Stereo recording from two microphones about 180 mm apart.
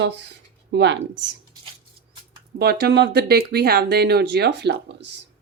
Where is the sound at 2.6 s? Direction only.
65° right (ahead or behind).